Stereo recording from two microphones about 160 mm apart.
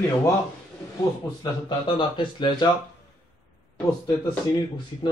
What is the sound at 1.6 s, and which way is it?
Speech, 30° left (ahead or behind).